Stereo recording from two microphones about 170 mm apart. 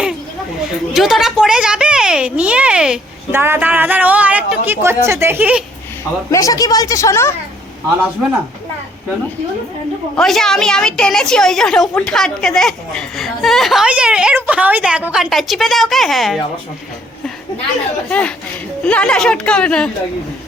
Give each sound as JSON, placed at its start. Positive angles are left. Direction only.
{"t": 0.9, "sound": "a woman's voice", "side_deg": 0}
{"t": 6.3, "sound": "a woman's voice", "side_deg": 20}
{"t": 10.2, "sound": "a woman's voice", "side_deg": 5}
{"t": 18.1, "sound": "speech", "side_deg": 5}